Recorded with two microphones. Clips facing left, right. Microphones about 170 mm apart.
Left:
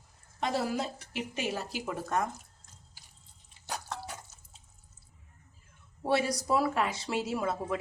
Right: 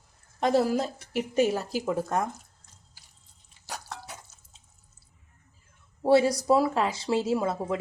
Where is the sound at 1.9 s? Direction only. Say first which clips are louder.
Right 4 dB; 30° right (ahead or behind).